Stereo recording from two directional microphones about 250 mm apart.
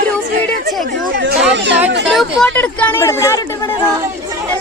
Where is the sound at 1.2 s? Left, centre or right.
Right.